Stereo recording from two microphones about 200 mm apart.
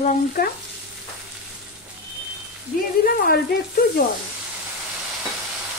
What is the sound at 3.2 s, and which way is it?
Speech, 50° left (ahead or behind).